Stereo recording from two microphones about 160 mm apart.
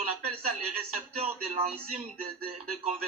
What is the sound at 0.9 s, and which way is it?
Speech, 45° right (ahead or behind).